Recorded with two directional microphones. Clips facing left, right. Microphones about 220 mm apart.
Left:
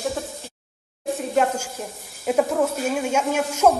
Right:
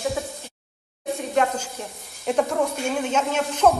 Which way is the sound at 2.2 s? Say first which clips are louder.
Left 2 dB; 5° left (ahead or behind).